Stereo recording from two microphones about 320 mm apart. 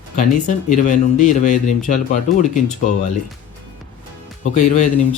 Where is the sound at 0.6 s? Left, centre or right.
Left.